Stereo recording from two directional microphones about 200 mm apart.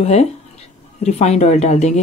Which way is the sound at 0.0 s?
30° left (ahead or behind).